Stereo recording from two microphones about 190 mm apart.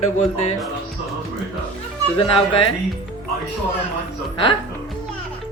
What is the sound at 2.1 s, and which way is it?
Speech, 30° left (ahead or behind).